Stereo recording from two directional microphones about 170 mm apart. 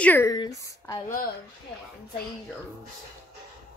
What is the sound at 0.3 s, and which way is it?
Speech, 20° left (ahead or behind).